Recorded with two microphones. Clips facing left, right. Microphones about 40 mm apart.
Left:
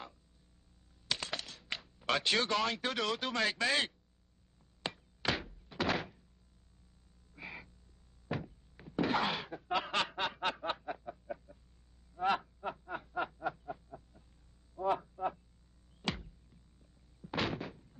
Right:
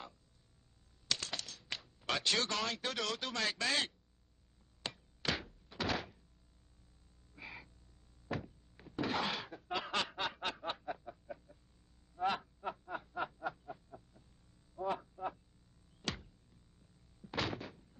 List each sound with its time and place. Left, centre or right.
1.0 s typing: centre
1.8 s speech: centre
4.8 s thunk: centre
7.3 s frog: centre
8.3 s thunk: centre
9.6 s snicker: centre
12.2 s a sound: centre
12.9 s snicker: centre
14.8 s a sound: centre
17.2 s door: centre